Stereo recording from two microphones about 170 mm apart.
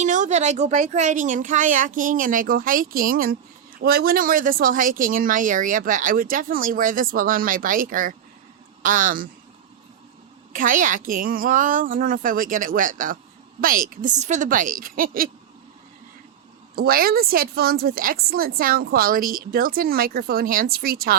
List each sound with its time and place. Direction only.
0.0 s a woman's voice: 45° right (ahead or behind)
10.5 s a woman's voice: 50° right (ahead or behind)
16.7 s a woman's voice: 60° right (ahead or behind)